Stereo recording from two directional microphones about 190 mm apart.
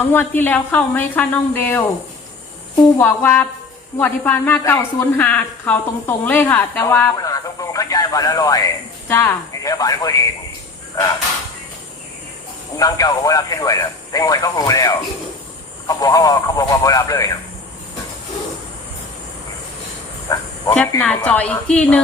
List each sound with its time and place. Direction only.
0.0 s speech: 10° left (ahead or behind)
3.0 s a woman's voice: 10° left (ahead or behind)
12.7 s speech: 20° left (ahead or behind)
20.3 s speech: 15° left (ahead or behind)